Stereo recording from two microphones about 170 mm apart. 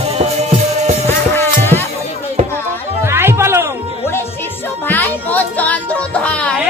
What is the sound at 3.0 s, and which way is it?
Chatter, 15° right (ahead or behind).